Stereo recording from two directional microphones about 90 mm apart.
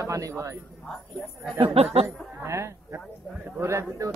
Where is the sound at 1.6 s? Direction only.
90° right.